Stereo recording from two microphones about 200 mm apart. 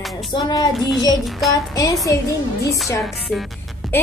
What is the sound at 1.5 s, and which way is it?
Speech, 15° left (ahead or behind).